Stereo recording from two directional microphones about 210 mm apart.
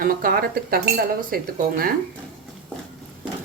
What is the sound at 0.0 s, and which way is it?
Speech, 40° right (ahead or behind).